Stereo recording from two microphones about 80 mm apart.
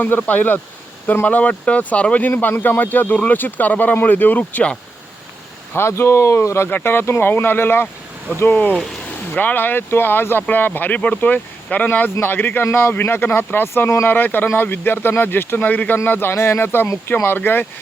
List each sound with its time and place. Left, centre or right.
0.0 s speech: left
5.7 s speech: left
6.7 s speech: left
9.3 s speech: left